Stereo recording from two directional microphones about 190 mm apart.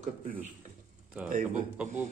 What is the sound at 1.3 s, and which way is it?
Speech, 45° right (ahead or behind).